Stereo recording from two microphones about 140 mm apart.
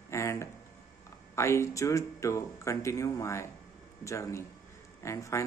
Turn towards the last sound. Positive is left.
turn(degrees=20)  # may be behind; listen again after turning